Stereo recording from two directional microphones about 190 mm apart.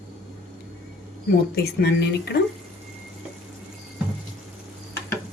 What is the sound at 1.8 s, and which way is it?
Speech, 60° left (ahead or behind).